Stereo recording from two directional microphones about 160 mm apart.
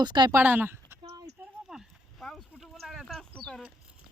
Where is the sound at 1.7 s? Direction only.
Centre (ahead or behind).